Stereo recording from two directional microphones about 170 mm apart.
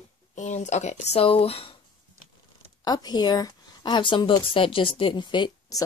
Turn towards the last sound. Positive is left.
turn(degrees=25)  # may be behind; listen again after turning